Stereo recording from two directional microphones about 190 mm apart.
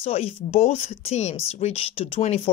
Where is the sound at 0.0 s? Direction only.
30° left (ahead or behind).